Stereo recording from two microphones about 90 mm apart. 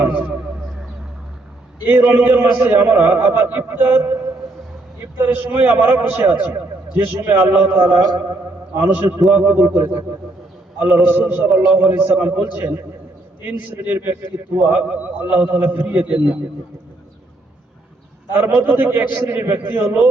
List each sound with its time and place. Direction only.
0.0 s a sound: 20° right (ahead or behind)
1.8 s a man's voice: 25° right (ahead or behind)
5.1 s a man's voice: 20° right (ahead or behind)
11.4 s a man's voice: 35° right (ahead or behind)
11.7 s a man's voice: 20° right (ahead or behind)
18.3 s a man's voice: 25° right (ahead or behind)